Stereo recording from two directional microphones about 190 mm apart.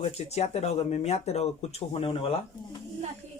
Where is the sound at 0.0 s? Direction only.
35° left (ahead or behind).